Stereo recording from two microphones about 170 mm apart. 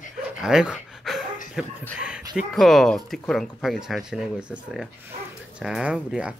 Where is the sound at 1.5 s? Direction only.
5° right (ahead or behind).